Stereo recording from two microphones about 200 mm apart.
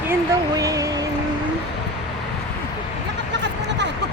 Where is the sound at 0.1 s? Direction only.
15° right (ahead or behind).